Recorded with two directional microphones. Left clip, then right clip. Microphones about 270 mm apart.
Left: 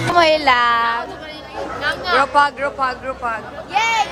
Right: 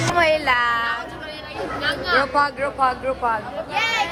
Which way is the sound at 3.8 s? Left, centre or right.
Left.